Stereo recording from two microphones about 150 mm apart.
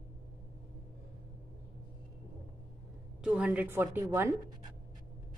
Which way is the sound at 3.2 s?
5° right (ahead or behind).